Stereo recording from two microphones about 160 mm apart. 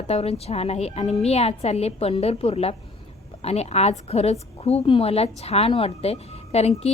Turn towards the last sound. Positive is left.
turn(degrees=40)  # may be behind; listen again after turning